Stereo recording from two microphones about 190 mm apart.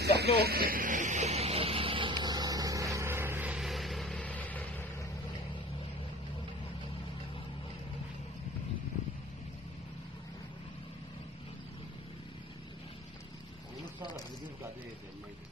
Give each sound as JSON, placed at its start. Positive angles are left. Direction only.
{"t": 0.0, "sound": "vehicle", "side_deg": -60}